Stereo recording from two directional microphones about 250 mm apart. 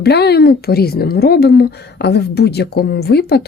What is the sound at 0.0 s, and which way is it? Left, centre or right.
A woman's voice, left.